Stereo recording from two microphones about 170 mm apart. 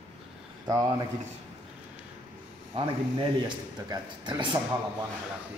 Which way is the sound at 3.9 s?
25° right (ahead or behind).